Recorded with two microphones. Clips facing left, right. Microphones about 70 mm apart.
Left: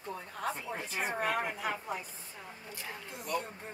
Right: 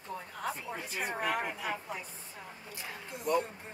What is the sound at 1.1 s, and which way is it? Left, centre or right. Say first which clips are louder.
Speech: even; left.